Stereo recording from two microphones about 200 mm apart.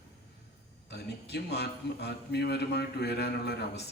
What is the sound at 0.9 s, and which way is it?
A man's voice, 55° left (ahead or behind).